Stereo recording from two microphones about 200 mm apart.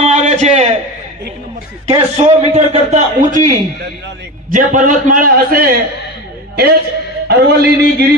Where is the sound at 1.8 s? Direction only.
35° right (ahead or behind).